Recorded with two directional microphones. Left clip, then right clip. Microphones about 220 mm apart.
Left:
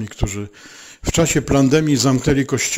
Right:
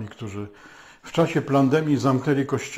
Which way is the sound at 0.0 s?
45° left (ahead or behind).